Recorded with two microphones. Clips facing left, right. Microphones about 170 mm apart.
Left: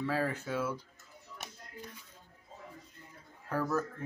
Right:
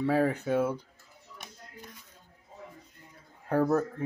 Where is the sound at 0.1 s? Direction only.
60° right (ahead or behind).